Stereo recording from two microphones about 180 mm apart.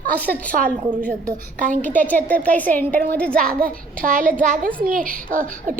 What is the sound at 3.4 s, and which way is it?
A child's voice, 55° right (ahead or behind).